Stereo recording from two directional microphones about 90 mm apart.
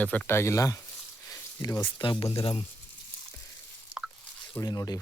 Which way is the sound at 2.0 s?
65° left (ahead or behind).